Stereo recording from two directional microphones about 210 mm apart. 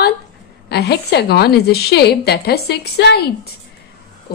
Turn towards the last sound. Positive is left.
turn(degrees=50)  # may be behind; listen again after turning